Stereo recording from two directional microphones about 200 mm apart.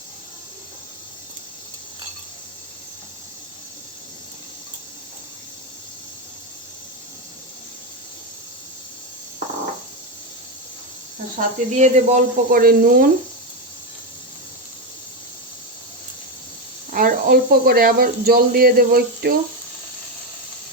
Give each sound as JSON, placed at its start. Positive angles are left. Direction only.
{"t": 11.3, "sound": "speech", "side_deg": -35}
{"t": 16.9, "sound": "speech", "side_deg": -45}